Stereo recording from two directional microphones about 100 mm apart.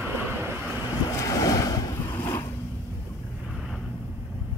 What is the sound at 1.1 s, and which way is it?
Waves, 35° left (ahead or behind).